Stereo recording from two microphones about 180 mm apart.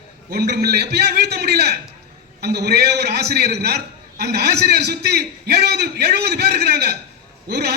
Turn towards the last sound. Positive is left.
turn(degrees=-65)  # may be behind; listen again after turning